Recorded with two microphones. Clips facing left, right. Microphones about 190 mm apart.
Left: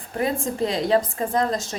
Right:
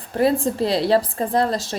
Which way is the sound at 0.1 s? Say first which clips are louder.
Right 6 dB; 35° right (ahead or behind).